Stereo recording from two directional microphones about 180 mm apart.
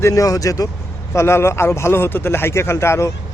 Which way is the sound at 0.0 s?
20° left (ahead or behind).